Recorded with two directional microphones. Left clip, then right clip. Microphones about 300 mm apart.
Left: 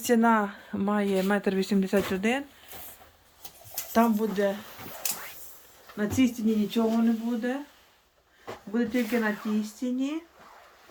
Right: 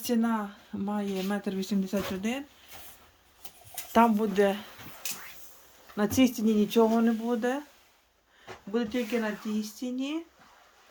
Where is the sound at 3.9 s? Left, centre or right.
Centre.